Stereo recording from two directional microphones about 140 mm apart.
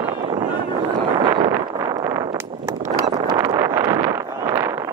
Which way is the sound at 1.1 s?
35° right (ahead or behind).